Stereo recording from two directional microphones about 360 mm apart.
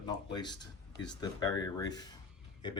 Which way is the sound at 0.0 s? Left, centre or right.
Centre.